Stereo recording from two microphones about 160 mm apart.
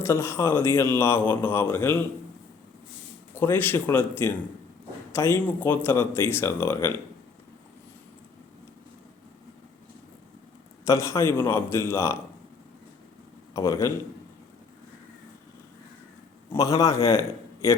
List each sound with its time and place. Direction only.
0.0 s a man's voice: 15° left (ahead or behind)
3.3 s a man's voice: 10° left (ahead or behind)
10.8 s a man's voice: 20° left (ahead or behind)
13.5 s a man's voice: 20° left (ahead or behind)
16.5 s a man's voice: 20° left (ahead or behind)